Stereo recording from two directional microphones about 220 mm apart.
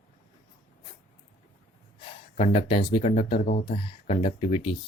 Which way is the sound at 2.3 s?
30° left (ahead or behind).